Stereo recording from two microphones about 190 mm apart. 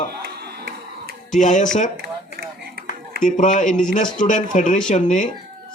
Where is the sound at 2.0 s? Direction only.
55° right (ahead or behind).